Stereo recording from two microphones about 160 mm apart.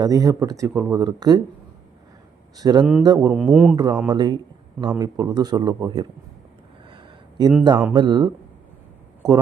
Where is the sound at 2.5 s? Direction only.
25° right (ahead or behind).